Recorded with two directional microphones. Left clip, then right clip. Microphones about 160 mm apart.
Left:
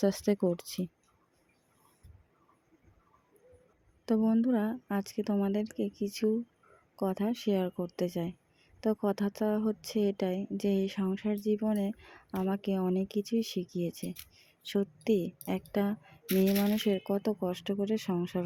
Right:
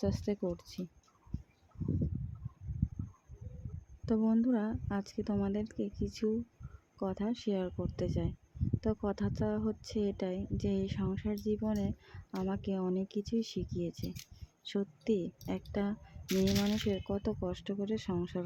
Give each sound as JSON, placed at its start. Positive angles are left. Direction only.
{"t": 0.0, "sound": "speech", "side_deg": 40}
{"t": 4.0, "sound": "a woman's voice", "side_deg": 30}
{"t": 16.2, "sound": "speech", "side_deg": 5}
{"t": 16.7, "sound": "a woman's voice", "side_deg": 30}